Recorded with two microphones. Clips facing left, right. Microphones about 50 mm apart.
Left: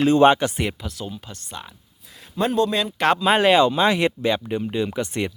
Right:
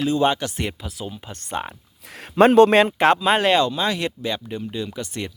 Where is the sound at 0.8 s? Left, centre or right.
Centre.